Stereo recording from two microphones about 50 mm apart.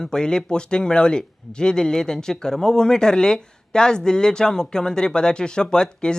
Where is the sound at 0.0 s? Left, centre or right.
Centre.